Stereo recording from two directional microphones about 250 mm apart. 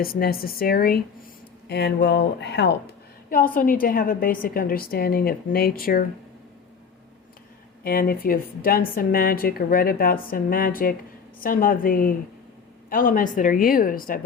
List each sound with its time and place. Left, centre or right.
0.0 s a woman's voice: left
7.9 s a woman's voice: left